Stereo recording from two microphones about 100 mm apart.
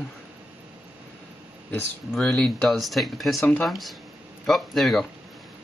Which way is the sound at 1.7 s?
5° left (ahead or behind).